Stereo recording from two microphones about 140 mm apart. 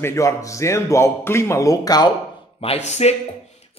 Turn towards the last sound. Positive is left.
turn(degrees=50)  # may be behind; listen again after turning